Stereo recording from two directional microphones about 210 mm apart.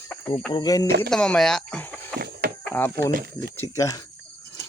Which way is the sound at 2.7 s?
10° left (ahead or behind).